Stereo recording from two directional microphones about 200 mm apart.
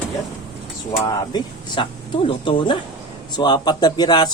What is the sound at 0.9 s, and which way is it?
Speech, 20° left (ahead or behind).